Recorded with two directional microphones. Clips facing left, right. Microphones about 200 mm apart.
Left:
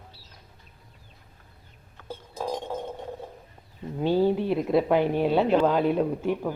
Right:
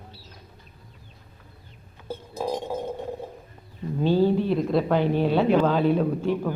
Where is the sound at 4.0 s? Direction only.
15° left (ahead or behind).